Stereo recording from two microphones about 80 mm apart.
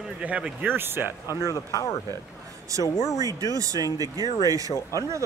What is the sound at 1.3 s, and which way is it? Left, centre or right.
Speech, left.